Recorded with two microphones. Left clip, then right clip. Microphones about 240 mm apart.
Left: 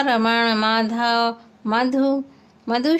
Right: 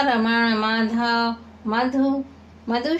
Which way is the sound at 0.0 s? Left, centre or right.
Left.